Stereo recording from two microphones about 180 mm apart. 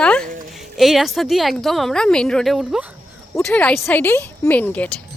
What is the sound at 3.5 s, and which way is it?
A woman's voice, 5° left (ahead or behind).